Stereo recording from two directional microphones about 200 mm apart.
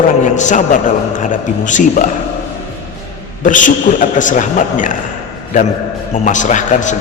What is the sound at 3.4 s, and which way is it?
A man's voice, 40° left (ahead or behind).